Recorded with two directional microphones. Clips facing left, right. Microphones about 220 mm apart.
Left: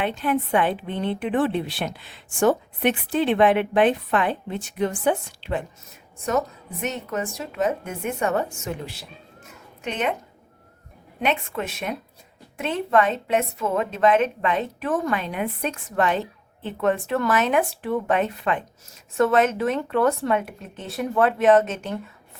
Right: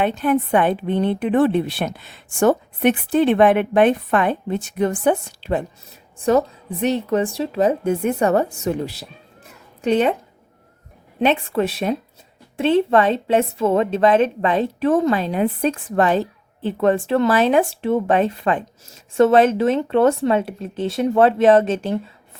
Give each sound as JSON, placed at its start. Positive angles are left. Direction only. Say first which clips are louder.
{"t": 0.0, "sound": "a woman's voice", "louder": "right 5 dB", "side_deg": -45}
{"t": 11.2, "sound": "a woman's voice", "louder": "right 7 dB", "side_deg": -35}